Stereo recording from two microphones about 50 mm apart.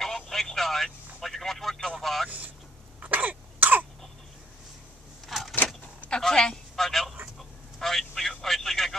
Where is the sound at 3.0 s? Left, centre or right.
Right.